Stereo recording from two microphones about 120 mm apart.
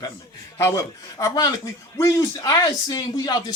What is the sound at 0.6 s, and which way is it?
A man's voice, 25° left (ahead or behind).